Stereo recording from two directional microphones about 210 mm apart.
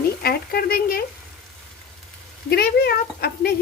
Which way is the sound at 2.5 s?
50° left (ahead or behind).